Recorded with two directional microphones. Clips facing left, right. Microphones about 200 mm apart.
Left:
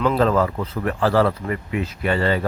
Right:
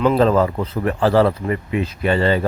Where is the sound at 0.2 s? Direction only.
25° right (ahead or behind).